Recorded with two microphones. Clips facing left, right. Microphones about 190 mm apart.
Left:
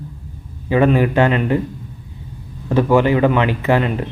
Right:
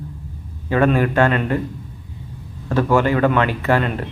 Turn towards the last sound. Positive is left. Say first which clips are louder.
# left 2 dB
turn(degrees=15)  # may be behind; listen again after turning